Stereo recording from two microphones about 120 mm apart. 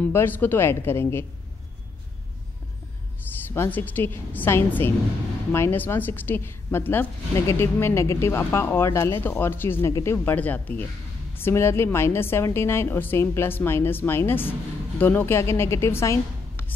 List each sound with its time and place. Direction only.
0.0 s a woman's voice: 15° left (ahead or behind)
3.5 s a woman's voice: 15° left (ahead or behind)